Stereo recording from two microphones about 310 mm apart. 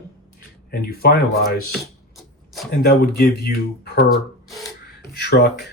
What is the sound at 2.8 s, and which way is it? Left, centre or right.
Speech, left.